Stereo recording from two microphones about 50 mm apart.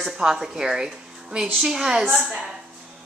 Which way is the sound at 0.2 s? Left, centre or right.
Centre.